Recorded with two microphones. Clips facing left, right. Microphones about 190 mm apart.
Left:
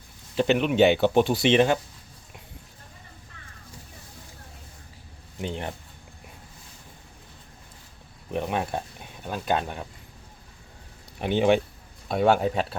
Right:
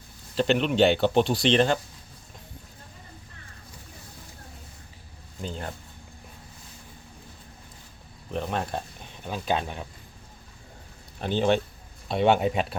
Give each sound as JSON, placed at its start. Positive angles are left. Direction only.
{"t": 0.3, "sound": "speech", "side_deg": 10}
{"t": 5.4, "sound": "speech", "side_deg": 20}
{"t": 8.3, "sound": "speech", "side_deg": 10}
{"t": 11.2, "sound": "speech", "side_deg": 15}
{"t": 12.1, "sound": "speech", "side_deg": 0}